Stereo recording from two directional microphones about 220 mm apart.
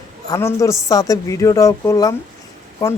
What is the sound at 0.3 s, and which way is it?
Speech, 10° left (ahead or behind).